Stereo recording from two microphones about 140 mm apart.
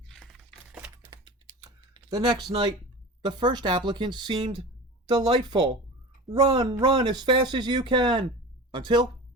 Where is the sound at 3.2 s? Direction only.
30° right (ahead or behind).